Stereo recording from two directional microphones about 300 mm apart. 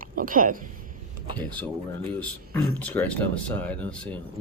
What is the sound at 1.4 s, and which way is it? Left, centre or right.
Speech, centre.